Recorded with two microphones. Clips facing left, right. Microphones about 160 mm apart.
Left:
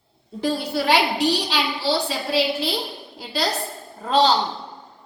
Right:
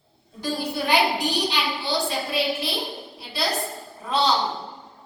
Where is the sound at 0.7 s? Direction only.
70° left (ahead or behind).